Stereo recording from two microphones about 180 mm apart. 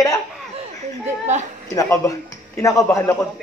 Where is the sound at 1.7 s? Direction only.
15° left (ahead or behind).